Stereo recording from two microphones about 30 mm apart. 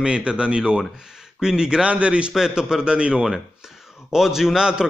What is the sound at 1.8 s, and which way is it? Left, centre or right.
Speech, right.